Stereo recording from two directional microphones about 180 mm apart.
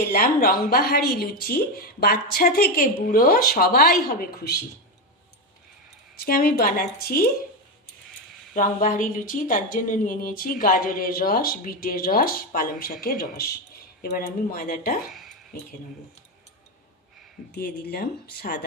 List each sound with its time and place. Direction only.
0.0 s speech: 55° left (ahead or behind)
6.1 s speech: 55° left (ahead or behind)
8.5 s a woman's voice: 50° left (ahead or behind)
17.5 s speech: 60° left (ahead or behind)